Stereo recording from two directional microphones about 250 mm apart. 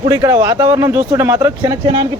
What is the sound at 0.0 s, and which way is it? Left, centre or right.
A man's voice, centre.